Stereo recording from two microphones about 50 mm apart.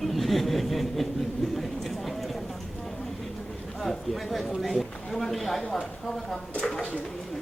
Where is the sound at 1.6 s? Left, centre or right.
Centre.